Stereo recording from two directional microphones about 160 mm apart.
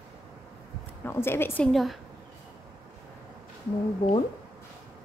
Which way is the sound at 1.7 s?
Centre (ahead or behind).